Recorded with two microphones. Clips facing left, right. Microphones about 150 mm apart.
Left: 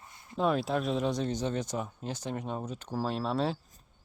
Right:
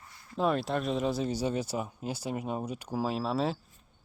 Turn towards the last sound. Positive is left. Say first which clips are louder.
# even
turn(degrees=0)  # may be behind; listen again after turning